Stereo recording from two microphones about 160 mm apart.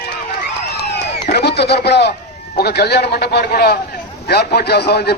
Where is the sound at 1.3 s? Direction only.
85° left.